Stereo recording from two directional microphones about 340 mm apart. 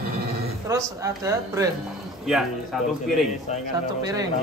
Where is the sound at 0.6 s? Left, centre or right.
Centre.